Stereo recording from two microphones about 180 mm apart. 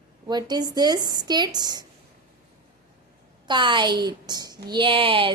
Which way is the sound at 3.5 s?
25° right (ahead or behind).